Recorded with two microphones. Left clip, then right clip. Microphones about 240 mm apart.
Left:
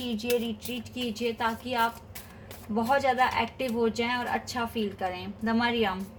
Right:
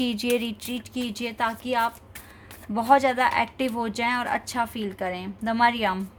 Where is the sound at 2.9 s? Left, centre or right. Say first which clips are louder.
Right 5 dB; right.